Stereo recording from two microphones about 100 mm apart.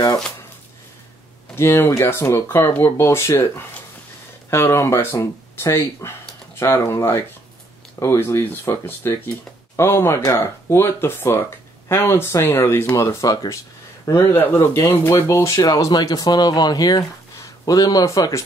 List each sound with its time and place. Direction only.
1.5 s speech: 25° left (ahead or behind)
14.0 s speech: 25° left (ahead or behind)